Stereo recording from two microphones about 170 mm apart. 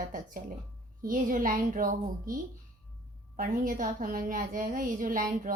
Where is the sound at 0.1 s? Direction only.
50° right (ahead or behind).